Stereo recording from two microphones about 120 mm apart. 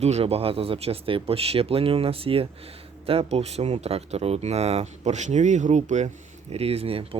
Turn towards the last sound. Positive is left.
turn(degrees=-50)  # may be behind; listen again after turning